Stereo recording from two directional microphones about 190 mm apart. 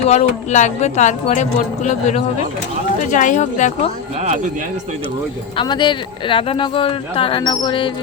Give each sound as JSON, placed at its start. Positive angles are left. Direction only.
{"t": 0.0, "sound": "speech", "side_deg": 35}
{"t": 5.5, "sound": "speech", "side_deg": 25}